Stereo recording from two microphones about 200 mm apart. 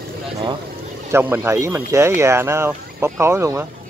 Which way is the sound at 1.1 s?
10° right (ahead or behind).